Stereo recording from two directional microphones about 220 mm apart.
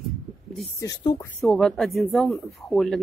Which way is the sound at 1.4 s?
Centre (ahead or behind).